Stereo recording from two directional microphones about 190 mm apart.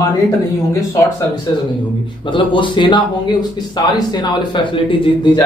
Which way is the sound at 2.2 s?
25° left (ahead or behind).